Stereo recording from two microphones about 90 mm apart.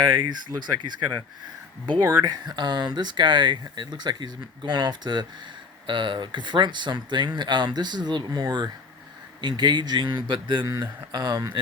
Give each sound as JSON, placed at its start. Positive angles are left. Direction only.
{"t": 0.0, "sound": "speech", "side_deg": -55}
{"t": 2.1, "sound": "speech", "side_deg": -50}
{"t": 10.7, "sound": "speech", "side_deg": -45}